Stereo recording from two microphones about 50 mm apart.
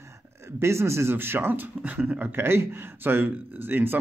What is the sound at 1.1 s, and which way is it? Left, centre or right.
Speech, right.